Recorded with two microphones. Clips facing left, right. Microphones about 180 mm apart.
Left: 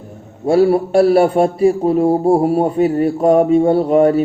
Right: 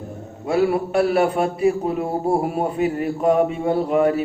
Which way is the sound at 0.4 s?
35° left (ahead or behind).